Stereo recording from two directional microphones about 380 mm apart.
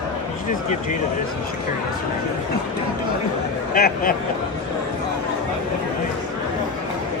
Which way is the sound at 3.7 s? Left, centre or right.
Left.